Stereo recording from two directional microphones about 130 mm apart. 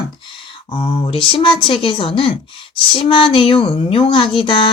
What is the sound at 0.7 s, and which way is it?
Speech, 40° left (ahead or behind).